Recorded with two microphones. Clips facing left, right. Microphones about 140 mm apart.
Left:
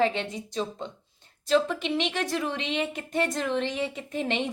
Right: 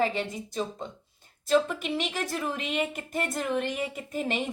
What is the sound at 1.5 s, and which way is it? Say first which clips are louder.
A woman's voice: left 1 dB; 5° right (ahead or behind).